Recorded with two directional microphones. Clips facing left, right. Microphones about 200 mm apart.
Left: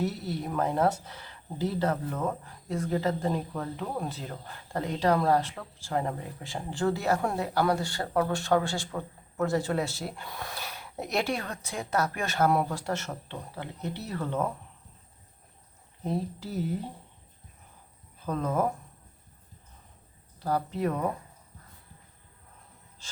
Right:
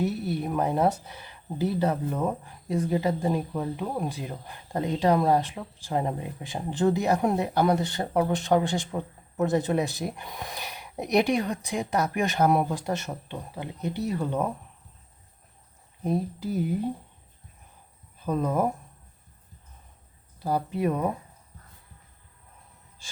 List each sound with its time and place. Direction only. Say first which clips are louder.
0.0 s speech: right 4 dB; 15° right (ahead or behind)
16.0 s speech: right 4 dB; 15° right (ahead or behind)
18.3 s speech: right 3 dB; 15° right (ahead or behind)
20.4 s speech: right 2 dB; 15° right (ahead or behind)